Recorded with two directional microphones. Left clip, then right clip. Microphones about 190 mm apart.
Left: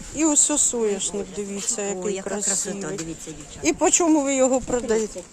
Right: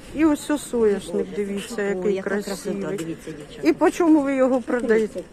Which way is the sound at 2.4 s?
60° left (ahead or behind).